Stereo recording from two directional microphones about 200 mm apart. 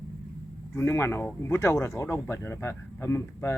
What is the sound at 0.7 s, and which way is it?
Speech, 10° left (ahead or behind).